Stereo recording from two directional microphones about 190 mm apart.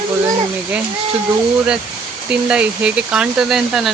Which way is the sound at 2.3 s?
5° right (ahead or behind).